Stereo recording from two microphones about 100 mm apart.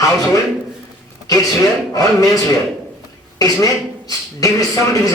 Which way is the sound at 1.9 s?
35° left (ahead or behind).